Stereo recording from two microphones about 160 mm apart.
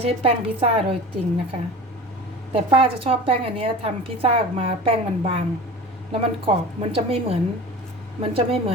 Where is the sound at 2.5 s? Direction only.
35° right (ahead or behind).